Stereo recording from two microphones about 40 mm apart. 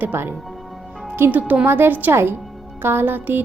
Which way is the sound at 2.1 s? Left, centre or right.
Right.